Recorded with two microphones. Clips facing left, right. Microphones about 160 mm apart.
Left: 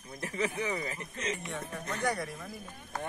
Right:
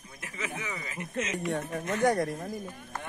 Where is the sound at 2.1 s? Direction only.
45° right (ahead or behind).